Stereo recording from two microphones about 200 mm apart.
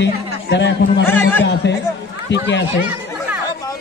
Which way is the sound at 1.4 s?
60° left (ahead or behind).